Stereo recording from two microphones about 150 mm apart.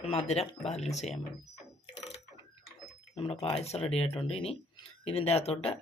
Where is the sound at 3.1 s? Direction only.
40° left (ahead or behind).